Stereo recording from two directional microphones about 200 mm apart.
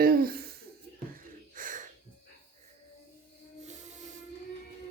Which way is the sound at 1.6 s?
40° right (ahead or behind).